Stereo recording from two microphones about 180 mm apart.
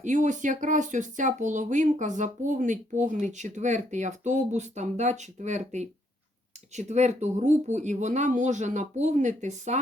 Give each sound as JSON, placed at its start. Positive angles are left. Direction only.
{"t": 0.0, "sound": "speech", "side_deg": -45}